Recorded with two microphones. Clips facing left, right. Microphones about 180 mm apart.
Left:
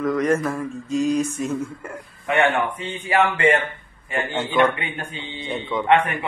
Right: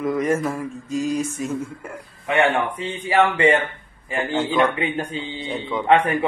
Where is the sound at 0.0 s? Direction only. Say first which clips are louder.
Left 1 dB; 5° right (ahead or behind).